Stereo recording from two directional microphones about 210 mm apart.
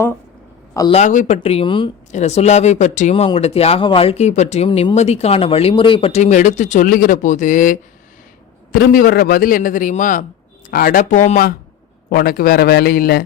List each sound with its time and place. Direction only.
0.7 s a man's voice: 15° left (ahead or behind)
0.9 s a man's voice: 35° left (ahead or behind)